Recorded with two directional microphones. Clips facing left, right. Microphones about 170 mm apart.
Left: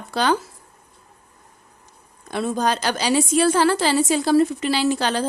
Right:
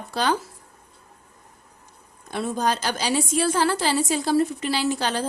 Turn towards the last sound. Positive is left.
turn(degrees=90)